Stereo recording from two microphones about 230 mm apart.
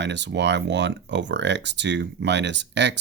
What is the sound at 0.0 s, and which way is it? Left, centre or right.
Speech, right.